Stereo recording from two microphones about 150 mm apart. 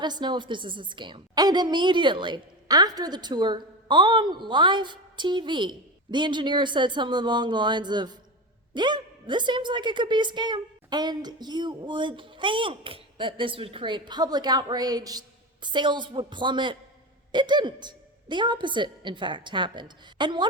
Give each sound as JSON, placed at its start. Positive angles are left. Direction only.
{"t": 0.0, "sound": "a woman's voice", "side_deg": -30}